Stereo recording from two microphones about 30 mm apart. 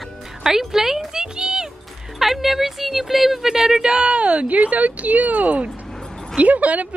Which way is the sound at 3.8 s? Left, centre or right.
Right.